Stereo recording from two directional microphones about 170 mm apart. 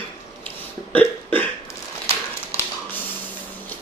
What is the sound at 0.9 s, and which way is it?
Burping, 10° left (ahead or behind).